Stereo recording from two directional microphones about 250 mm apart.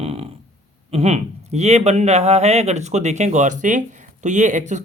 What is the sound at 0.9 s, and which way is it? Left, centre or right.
Speech, right.